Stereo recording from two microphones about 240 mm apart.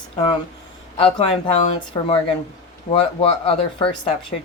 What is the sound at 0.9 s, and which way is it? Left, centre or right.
Speech, left.